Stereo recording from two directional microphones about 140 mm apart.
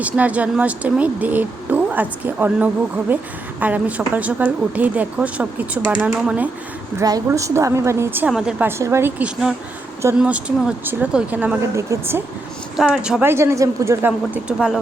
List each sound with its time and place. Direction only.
0.0 s speech: 10° right (ahead or behind)
7.0 s a woman's voice: 25° right (ahead or behind)
8.3 s a woman's voice: 5° right (ahead or behind)
12.7 s speech: 5° right (ahead or behind)
13.3 s a woman's voice: 20° right (ahead or behind)
14.4 s a woman's voice: 5° right (ahead or behind)